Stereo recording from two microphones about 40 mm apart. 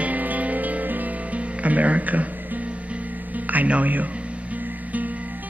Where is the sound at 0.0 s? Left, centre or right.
Right.